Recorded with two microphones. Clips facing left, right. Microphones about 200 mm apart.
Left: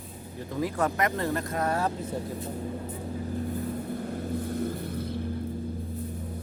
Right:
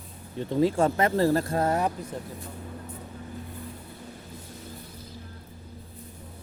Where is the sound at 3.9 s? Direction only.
55° left (ahead or behind).